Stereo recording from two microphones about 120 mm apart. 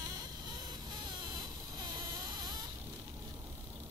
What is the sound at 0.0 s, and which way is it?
Vehicle, 30° right (ahead or behind).